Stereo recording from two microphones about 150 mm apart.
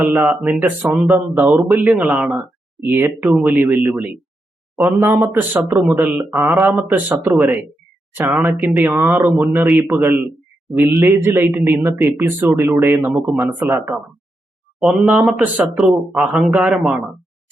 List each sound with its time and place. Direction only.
0.0 s a man's voice: 10° right (ahead or behind)